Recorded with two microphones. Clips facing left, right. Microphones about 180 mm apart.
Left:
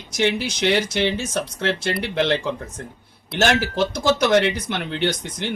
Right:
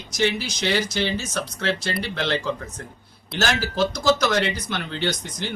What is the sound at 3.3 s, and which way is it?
Speech, 25° left (ahead or behind).